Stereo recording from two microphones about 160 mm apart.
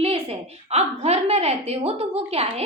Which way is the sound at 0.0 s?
40° right (ahead or behind).